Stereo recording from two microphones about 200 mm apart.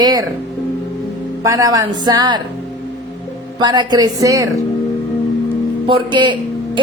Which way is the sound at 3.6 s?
20° right (ahead or behind).